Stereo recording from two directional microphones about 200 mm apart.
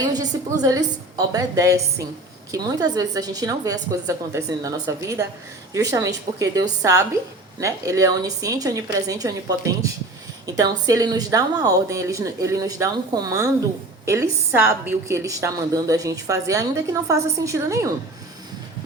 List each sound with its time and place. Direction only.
0.1 s a woman's voice: 20° right (ahead or behind)